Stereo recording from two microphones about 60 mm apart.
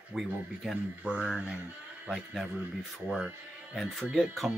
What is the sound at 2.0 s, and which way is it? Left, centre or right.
Speech, centre.